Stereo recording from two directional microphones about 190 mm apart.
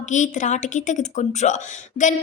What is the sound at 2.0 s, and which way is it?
Speech, 40° left (ahead or behind).